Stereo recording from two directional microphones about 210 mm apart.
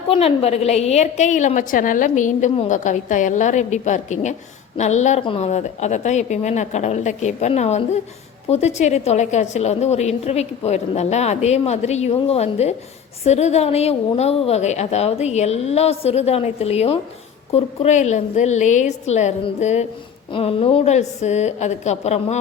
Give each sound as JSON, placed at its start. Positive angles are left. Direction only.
{"t": 0.1, "sound": "a woman's voice", "side_deg": 30}